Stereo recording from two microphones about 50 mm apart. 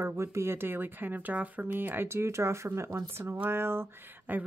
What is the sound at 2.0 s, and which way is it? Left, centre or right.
Speech, right.